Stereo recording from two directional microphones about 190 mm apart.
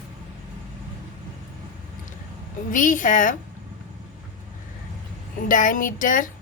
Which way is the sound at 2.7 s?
45° left (ahead or behind).